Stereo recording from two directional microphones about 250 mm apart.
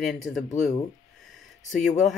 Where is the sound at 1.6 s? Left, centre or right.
Centre.